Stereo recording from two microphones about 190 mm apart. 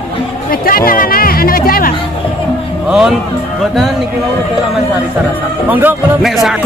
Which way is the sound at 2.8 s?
5° right (ahead or behind).